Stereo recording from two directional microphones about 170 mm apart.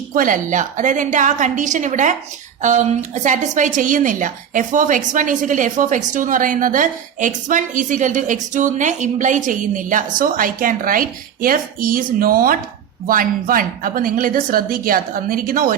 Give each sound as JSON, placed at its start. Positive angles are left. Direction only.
{"t": 0.1, "sound": "a woman's voice", "side_deg": -55}